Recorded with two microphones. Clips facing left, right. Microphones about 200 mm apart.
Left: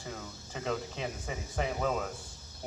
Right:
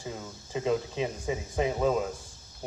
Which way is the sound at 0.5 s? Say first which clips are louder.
Right 7 dB; 15° right (ahead or behind).